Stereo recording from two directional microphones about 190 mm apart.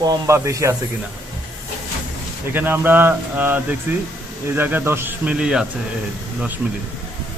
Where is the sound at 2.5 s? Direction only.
10° right (ahead or behind).